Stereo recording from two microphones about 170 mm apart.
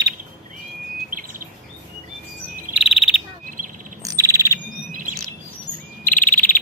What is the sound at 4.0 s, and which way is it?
Bird, 20° right (ahead or behind).